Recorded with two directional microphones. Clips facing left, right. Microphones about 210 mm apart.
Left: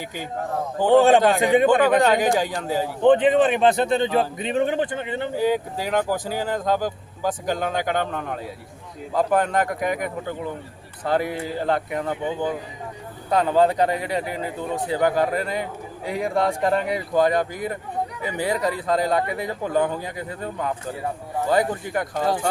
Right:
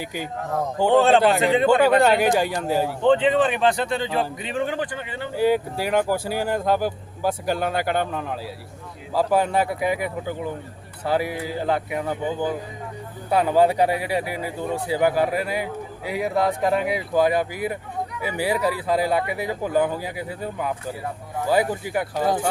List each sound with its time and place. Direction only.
0.0 s speech: 10° right (ahead or behind)
0.9 s a man's voice: 15° left (ahead or behind)
1.6 s speech: 10° right (ahead or behind)
3.0 s speech: 15° left (ahead or behind)
5.4 s speech: 10° right (ahead or behind)